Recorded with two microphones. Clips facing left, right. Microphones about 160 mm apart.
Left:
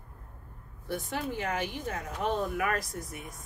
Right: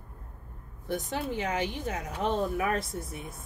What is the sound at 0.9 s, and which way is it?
Speech, 20° right (ahead or behind).